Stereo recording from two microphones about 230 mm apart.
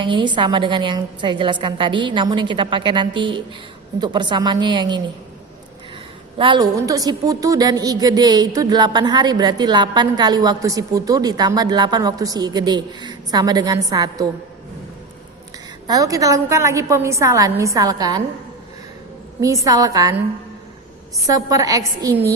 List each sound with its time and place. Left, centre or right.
0.0 s a woman's voice: centre
6.3 s a woman's voice: right
15.9 s a woman's voice: centre
19.4 s a woman's voice: centre
21.2 s a woman's voice: centre